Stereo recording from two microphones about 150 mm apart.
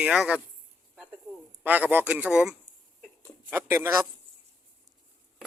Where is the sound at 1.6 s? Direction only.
10° right (ahead or behind).